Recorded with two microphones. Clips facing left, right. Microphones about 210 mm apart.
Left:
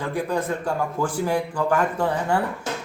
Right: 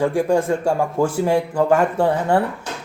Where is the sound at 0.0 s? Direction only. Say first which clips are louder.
Right 8 dB; 30° right (ahead or behind).